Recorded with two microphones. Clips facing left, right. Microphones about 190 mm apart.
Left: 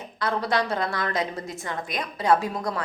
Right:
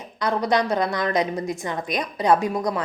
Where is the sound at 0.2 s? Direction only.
15° right (ahead or behind).